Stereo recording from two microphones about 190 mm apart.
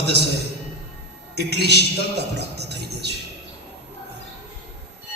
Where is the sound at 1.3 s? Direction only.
60° right (ahead or behind).